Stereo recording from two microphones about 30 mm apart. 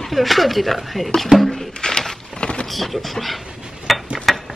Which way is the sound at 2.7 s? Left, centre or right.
Centre.